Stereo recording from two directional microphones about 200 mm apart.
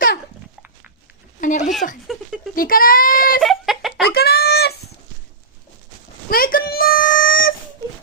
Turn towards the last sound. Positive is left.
turn(degrees=45)  # may be behind; listen again after turning